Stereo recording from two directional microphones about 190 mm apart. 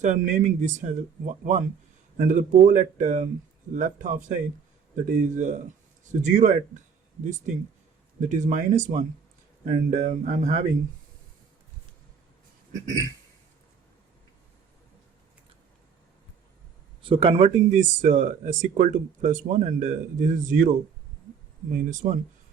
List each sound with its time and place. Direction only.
0.0 s a man's voice: 40° right (ahead or behind)
17.0 s speech: 30° right (ahead or behind); by 20.7 s 45° right (ahead or behind)
21.7 s a man's voice: 45° right (ahead or behind)